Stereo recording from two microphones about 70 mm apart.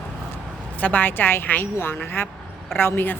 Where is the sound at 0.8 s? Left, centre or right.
Left.